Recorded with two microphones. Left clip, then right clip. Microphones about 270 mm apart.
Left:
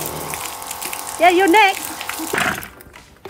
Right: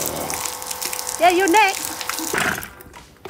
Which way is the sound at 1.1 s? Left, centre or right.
Left.